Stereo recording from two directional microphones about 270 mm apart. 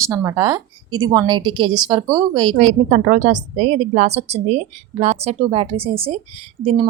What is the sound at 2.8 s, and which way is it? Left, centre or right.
A woman's voice, right.